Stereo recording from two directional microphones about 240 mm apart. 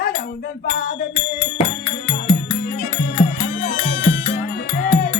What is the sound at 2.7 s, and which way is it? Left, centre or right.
Music, left.